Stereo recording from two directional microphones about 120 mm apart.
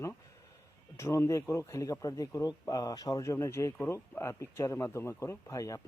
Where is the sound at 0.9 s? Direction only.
25° left (ahead or behind).